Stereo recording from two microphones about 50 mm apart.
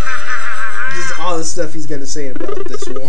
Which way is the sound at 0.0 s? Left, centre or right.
Centre.